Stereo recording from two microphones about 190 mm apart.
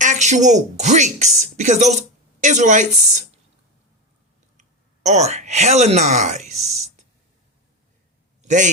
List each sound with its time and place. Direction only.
0.0 s speech: 40° right (ahead or behind)
5.0 s speech: 35° right (ahead or behind)
8.4 s a sound: 40° right (ahead or behind)